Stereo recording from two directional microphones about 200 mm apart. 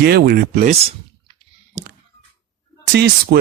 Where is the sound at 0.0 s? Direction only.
50° right (ahead or behind).